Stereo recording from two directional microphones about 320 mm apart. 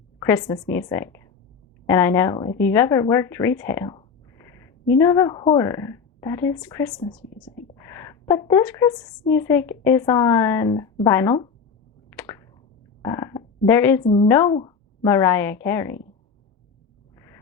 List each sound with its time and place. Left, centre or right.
0.3 s a woman's voice: centre
12.1 s a sound: centre
13.0 s speech: centre
14.0 s a woman's voice: centre